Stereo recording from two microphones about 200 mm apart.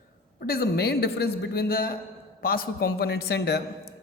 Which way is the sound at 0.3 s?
50° left (ahead or behind).